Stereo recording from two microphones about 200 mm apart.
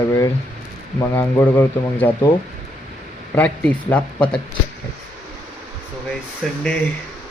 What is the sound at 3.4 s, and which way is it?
Speech, 5° left (ahead or behind).